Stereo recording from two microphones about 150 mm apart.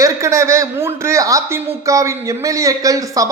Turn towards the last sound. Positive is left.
turn(degrees=-25)  # may be behind; listen again after turning